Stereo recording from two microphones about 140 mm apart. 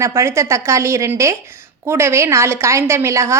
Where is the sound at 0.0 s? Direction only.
20° right (ahead or behind).